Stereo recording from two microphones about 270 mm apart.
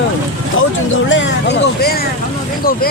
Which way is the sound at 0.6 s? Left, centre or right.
Left.